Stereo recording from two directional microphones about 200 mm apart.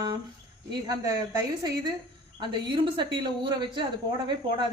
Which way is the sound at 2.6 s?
25° right (ahead or behind).